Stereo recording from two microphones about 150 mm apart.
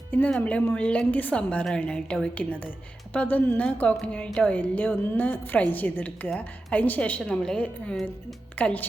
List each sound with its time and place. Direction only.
0.1 s a woman's voice: 10° left (ahead or behind)